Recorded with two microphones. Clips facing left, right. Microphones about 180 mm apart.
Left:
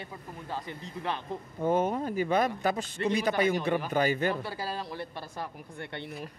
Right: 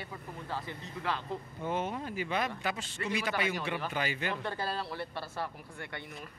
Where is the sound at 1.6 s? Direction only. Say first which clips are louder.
Left 8 dB; 45° left (ahead or behind).